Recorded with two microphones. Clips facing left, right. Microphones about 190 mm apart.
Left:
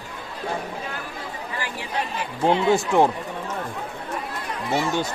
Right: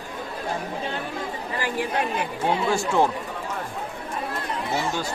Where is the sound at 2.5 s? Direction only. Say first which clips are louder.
Left 5 dB; 20° left (ahead or behind).